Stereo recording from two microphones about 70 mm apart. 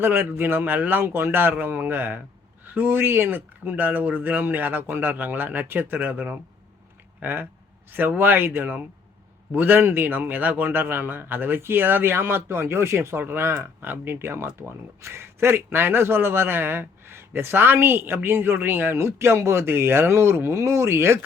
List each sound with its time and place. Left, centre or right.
0.0 s speech: right